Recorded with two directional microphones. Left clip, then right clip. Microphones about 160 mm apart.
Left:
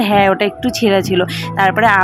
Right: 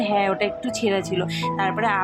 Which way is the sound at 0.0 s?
45° left (ahead or behind).